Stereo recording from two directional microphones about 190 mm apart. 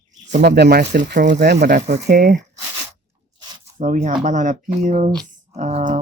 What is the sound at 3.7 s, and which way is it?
Speech, 40° right (ahead or behind).